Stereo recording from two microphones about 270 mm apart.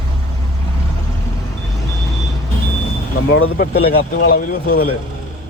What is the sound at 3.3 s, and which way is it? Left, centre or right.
Speech, left.